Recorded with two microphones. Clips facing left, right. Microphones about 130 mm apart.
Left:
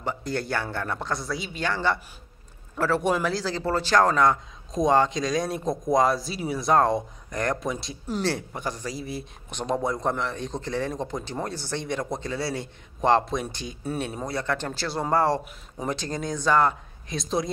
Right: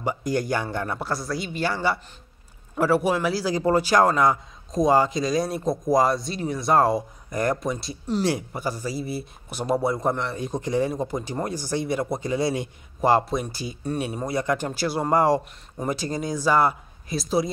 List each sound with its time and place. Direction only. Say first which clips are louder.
0.0 s a man's voice: right 4 dB; 10° right (ahead or behind)
8.2 s a man's voice: right 2 dB; 10° right (ahead or behind)
13.0 s a man's voice: right 1 dB; 5° right (ahead or behind)